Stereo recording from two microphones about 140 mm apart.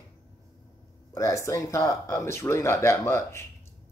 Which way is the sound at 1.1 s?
20° left (ahead or behind).